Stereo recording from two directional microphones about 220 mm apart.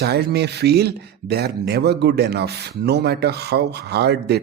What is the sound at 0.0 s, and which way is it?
Speech, 50° right (ahead or behind).